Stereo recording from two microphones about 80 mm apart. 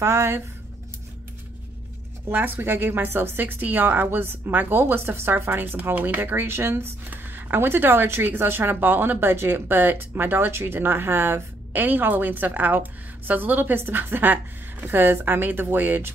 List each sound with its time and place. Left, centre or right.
0.0 s speech: right
2.2 s a woman's voice: right